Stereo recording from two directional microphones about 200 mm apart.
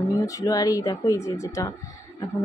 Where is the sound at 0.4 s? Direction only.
20° left (ahead or behind).